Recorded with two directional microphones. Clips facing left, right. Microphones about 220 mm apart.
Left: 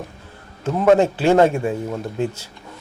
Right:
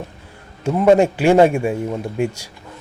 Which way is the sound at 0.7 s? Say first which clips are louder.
Right 2 dB; 10° right (ahead or behind).